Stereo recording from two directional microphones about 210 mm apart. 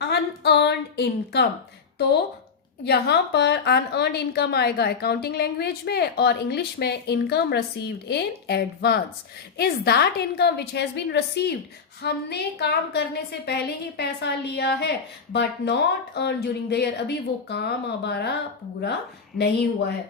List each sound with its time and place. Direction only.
0.1 s a woman's voice: 55° left (ahead or behind)
2.8 s a woman's voice: 50° left (ahead or behind)